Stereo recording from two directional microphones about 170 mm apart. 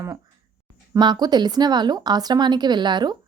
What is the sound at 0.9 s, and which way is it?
A woman's voice, 25° right (ahead or behind).